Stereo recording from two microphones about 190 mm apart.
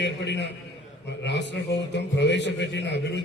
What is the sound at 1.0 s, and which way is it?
A man's voice, 65° left (ahead or behind).